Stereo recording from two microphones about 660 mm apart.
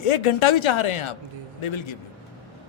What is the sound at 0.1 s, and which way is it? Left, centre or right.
A man's voice, left.